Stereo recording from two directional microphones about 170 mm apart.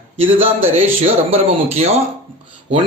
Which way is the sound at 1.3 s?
35° right (ahead or behind).